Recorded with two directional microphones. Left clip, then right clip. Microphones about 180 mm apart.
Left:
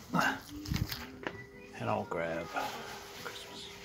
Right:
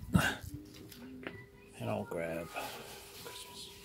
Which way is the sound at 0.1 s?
45° right (ahead or behind).